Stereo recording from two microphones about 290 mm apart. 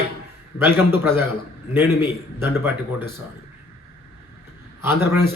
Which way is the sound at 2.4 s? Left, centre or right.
Centre.